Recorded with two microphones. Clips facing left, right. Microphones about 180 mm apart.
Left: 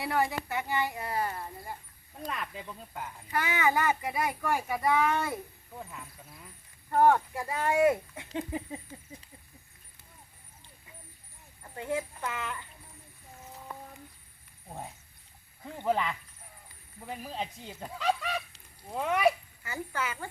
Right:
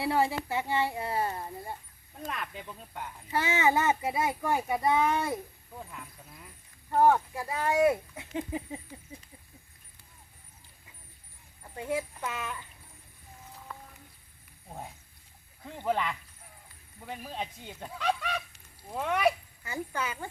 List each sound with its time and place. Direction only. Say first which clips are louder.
0.0 s a child's voice: right 2 dB; 25° right (ahead or behind)
2.2 s speech: even; centre (ahead or behind)
3.2 s a child's voice: right 2 dB; 25° right (ahead or behind)
5.7 s speech: left 1 dB; 5° left (ahead or behind)
6.9 s speech: even; 5° right (ahead or behind)
11.6 s speech: right 1 dB; 10° right (ahead or behind)
15.6 s speech: left 1 dB; centre (ahead or behind)
19.6 s speech: right 1 dB; 15° right (ahead or behind)